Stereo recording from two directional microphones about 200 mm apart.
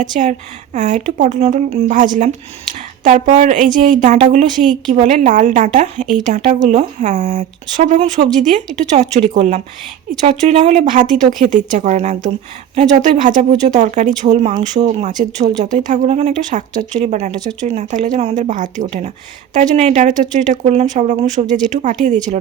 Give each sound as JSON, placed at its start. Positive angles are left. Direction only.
{"t": 0.0, "sound": "a woman's voice", "side_deg": -40}